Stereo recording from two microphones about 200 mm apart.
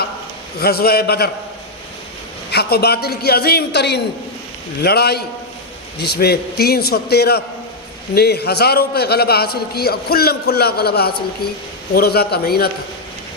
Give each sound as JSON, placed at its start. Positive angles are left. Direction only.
{"t": 0.6, "sound": "a man's voice", "side_deg": 50}
{"t": 2.5, "sound": "a man's voice", "side_deg": 50}